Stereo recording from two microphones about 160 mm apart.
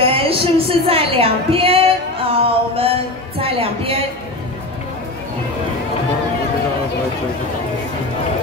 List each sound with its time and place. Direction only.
0.0 s speech: 35° right (ahead or behind)